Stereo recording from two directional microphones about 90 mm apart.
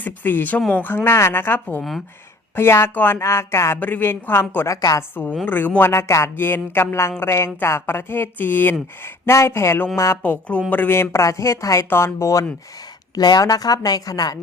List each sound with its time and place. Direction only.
0.0 s speech: 20° left (ahead or behind)
5.9 s speech: 30° left (ahead or behind)
10.2 s a woman's voice: 15° left (ahead or behind); by 12.5 s 35° left (ahead or behind)
13.1 s a woman's voice: 45° left (ahead or behind)